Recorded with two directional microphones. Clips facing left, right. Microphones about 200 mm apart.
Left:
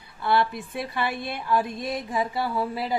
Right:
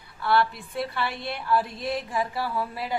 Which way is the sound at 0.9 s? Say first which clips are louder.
Left 2 dB; 15° left (ahead or behind).